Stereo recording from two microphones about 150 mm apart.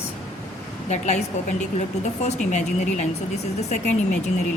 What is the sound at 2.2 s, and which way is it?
A woman's voice, 50° left (ahead or behind).